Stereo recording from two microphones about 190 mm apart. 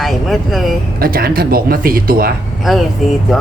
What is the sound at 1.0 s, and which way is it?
Speech, 50° right (ahead or behind).